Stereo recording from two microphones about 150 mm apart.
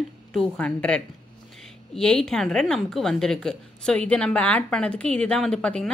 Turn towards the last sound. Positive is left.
turn(degrees=5)  # may be behind; listen again after turning